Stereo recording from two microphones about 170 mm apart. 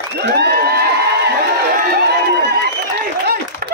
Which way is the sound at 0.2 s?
75° right (ahead or behind).